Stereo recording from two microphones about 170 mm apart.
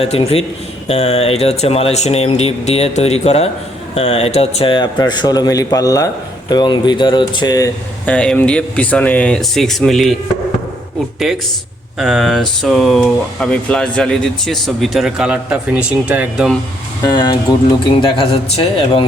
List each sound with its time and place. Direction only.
0.0 s a man's voice: 35° left (ahead or behind)
8.0 s speech: 5° left (ahead or behind)
11.3 s speech: 5° right (ahead or behind)
17.1 s a man's voice: 25° left (ahead or behind)